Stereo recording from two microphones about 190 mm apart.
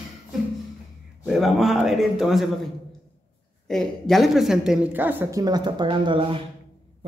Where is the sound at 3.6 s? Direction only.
Centre (ahead or behind).